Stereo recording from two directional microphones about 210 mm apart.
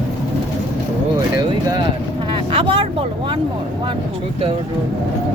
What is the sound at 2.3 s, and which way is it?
Vehicle, 25° right (ahead or behind).